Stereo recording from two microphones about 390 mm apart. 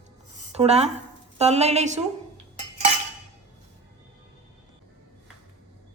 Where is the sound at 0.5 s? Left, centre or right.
Centre.